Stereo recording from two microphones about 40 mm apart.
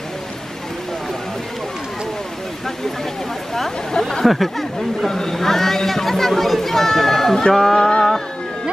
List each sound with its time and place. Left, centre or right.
3.5 s speech: centre
4.3 s speech: centre